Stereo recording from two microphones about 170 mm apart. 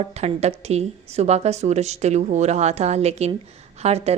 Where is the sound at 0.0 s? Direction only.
35° right (ahead or behind).